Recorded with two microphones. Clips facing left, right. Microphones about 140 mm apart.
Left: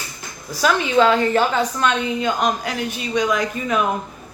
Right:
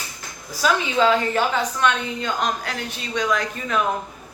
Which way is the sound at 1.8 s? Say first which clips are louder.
Left 2 dB; 10° left (ahead or behind).